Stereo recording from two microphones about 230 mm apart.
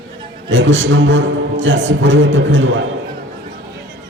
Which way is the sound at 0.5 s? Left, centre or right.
Right.